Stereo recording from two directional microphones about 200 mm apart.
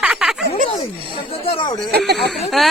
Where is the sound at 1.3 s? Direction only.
30° left (ahead or behind).